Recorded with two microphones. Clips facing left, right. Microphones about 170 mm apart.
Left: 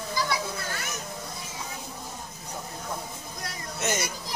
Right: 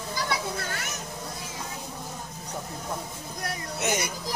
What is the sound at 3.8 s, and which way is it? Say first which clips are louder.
Music: right 1 dB; 15° right (ahead or behind).